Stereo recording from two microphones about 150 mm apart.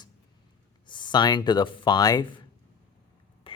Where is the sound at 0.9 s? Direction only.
30° left (ahead or behind).